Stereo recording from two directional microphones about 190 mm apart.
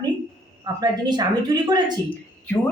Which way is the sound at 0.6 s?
20° right (ahead or behind).